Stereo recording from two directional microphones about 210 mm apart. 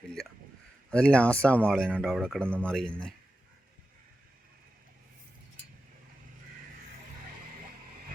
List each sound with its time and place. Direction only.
0.9 s speech: 5° left (ahead or behind)